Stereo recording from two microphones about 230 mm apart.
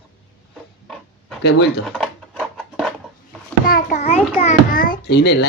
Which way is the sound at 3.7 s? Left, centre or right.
Left.